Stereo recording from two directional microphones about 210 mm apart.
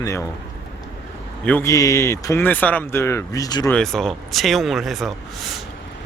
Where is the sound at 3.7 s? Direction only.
5° left (ahead or behind).